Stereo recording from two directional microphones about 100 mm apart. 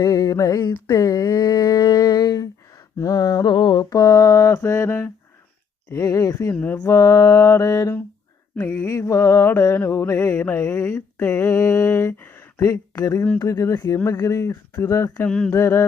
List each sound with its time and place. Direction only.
0.0 s a sound: 35° left (ahead or behind)
4.9 s speech: 15° left (ahead or behind)
5.9 s mantra: 35° left (ahead or behind)
6.5 s speech: 20° left (ahead or behind)
6.7 s mantra: 35° left (ahead or behind)
10.3 s speech: 15° left (ahead or behind)
10.6 s mantra: 30° left (ahead or behind)
11.3 s a sound: 30° left (ahead or behind)
12.9 s speech: 40° left (ahead or behind)
13.4 s mantra: 30° left (ahead or behind)
15.3 s speech: 10° left (ahead or behind)
15.5 s mantra: 25° left (ahead or behind)